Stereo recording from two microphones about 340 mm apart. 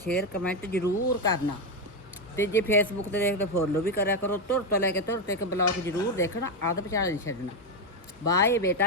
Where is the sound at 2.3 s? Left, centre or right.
Centre.